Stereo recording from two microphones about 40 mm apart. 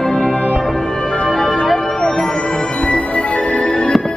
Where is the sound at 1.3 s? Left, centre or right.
Centre.